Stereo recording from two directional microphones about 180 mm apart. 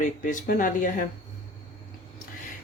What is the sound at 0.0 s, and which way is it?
Speech, 45° left (ahead or behind).